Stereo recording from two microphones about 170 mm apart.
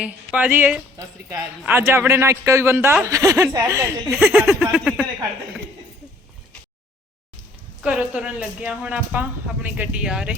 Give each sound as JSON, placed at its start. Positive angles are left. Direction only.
{"t": 0.0, "sound": "a man's voice", "side_deg": -5}
{"t": 7.8, "sound": "a man's voice", "side_deg": -5}